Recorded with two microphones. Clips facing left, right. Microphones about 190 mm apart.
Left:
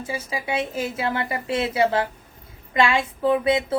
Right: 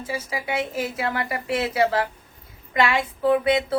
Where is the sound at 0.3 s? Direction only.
25° left (ahead or behind).